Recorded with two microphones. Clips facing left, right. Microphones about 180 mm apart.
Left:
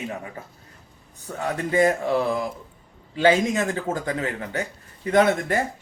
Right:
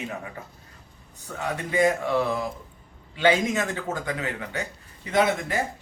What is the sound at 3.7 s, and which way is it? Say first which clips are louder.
Speech: left 3 dB; 35° left (ahead or behind).